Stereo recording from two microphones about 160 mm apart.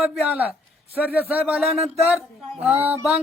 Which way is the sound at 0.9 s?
10° right (ahead or behind).